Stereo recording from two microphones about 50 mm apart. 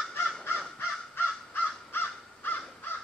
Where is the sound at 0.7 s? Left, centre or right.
Left.